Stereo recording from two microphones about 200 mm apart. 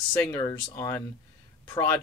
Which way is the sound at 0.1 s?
10° left (ahead or behind).